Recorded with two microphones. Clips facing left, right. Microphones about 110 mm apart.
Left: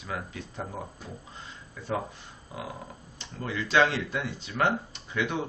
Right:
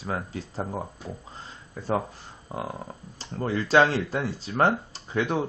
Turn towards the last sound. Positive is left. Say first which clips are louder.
# right 4 dB
turn(degrees=-35)  # may be behind; listen again after turning